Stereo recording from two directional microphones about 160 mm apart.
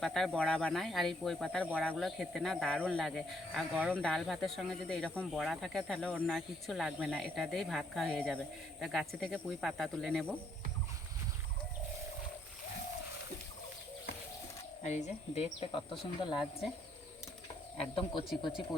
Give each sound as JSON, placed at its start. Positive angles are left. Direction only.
{"t": 0.0, "sound": "speech", "side_deg": 0}
{"t": 14.8, "sound": "speech", "side_deg": 45}
{"t": 17.7, "sound": "speech", "side_deg": 35}